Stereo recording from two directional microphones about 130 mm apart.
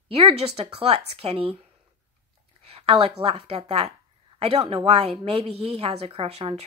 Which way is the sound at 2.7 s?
45° right (ahead or behind).